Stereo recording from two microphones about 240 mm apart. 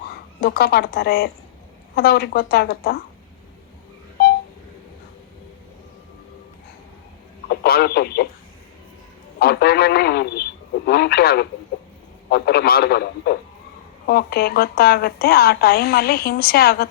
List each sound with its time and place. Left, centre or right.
0.0 s a woman's voice: left
7.4 s radio: left
9.4 s a woman's voice: left